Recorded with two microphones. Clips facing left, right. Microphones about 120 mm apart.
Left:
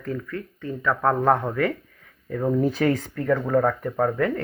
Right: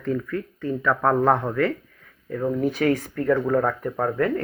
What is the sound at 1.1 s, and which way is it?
Speech, 5° left (ahead or behind).